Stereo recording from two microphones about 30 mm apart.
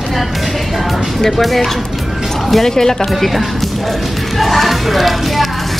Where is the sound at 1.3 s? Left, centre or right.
Centre.